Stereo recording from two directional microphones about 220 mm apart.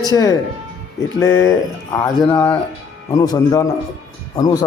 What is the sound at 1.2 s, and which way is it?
Speech, 60° left (ahead or behind).